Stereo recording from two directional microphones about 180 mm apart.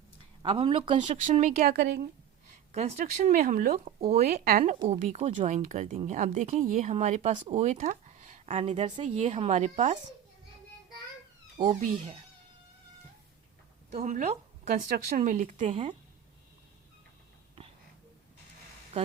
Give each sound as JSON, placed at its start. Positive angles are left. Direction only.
{"t": 0.4, "sound": "speech", "side_deg": -30}
{"t": 2.7, "sound": "speech", "side_deg": -40}
{"t": 4.9, "sound": "speech", "side_deg": -40}
{"t": 11.5, "sound": "speech", "side_deg": -30}
{"t": 13.9, "sound": "speech", "side_deg": -40}